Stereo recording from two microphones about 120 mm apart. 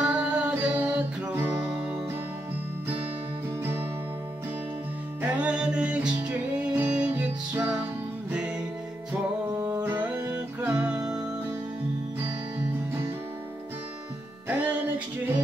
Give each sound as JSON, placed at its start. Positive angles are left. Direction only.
{"t": 0.0, "sound": "music", "side_deg": -10}
{"t": 5.2, "sound": "music", "side_deg": -10}
{"t": 14.5, "sound": "music", "side_deg": -15}